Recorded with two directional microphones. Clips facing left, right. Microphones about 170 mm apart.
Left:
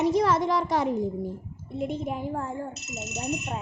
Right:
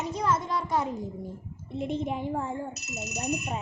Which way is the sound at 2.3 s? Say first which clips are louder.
Even; 5° right (ahead or behind).